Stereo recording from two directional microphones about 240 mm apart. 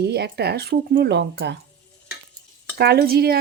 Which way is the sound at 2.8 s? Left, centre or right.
Right.